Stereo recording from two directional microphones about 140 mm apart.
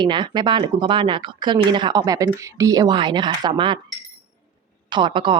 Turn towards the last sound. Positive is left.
turn(degrees=-35)  # may be behind; listen again after turning